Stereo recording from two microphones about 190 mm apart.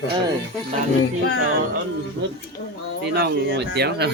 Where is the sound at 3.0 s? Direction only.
60° right (ahead or behind).